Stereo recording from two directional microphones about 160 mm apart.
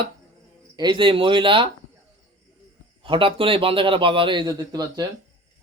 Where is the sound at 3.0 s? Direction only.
35° right (ahead or behind).